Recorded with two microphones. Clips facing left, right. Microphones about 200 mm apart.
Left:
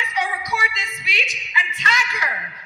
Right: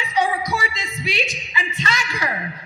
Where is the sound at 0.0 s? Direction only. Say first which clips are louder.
Right 5 dB; 30° right (ahead or behind).